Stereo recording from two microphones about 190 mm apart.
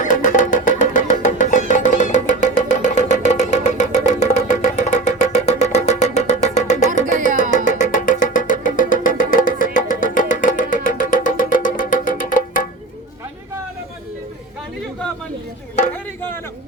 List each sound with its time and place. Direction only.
0.0 s music: 45° left (ahead or behind)